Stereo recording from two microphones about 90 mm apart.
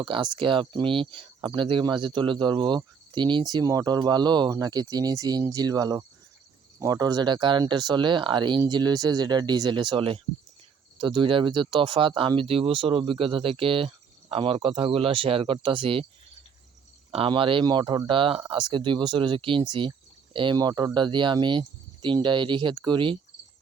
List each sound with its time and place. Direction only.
0.0 s speech: 60° right (ahead or behind)
12.4 s speech: 90° right
17.1 s speech: 85° right
17.7 s speech: 55° right (ahead or behind); by 18.4 s 80° right
18.5 s speech: 60° right (ahead or behind)
20.6 s speech: 45° right (ahead or behind)
20.9 s speech: 60° right (ahead or behind)